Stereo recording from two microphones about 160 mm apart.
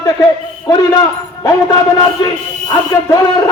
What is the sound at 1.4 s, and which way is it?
A man's voice, 25° left (ahead or behind).